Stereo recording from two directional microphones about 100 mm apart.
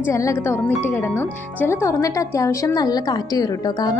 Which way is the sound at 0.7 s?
15° left (ahead or behind).